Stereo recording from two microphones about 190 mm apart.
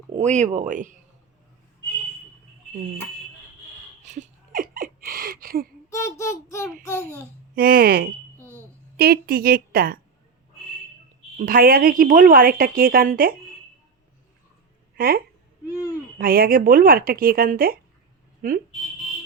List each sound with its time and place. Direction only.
0.1 s speech: 35° right (ahead or behind)
4.0 s a sound: 40° right (ahead or behind)
5.9 s a child's voice: 15° left (ahead or behind)
7.5 s a woman's voice: 50° right (ahead or behind)
8.4 s a sound: 15° right (ahead or behind)
9.0 s a woman's voice: 55° right (ahead or behind)
11.3 s a woman's voice: 50° right (ahead or behind)
14.9 s a woman's voice: 50° right (ahead or behind)